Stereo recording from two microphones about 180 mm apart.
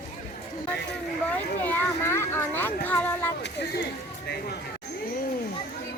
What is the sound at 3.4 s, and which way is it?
Speech, 70° left (ahead or behind).